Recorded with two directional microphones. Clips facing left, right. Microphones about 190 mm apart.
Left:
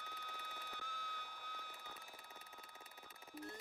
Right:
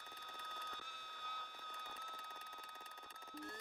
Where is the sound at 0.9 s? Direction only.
90° left.